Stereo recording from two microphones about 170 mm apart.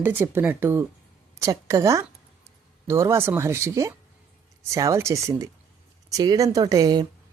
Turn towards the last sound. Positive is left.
turn(degrees=-25)  # may be behind; listen again after turning